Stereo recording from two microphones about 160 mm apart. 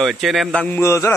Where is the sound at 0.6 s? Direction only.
15° left (ahead or behind).